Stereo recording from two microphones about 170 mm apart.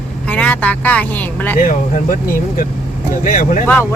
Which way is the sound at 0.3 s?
10° left (ahead or behind).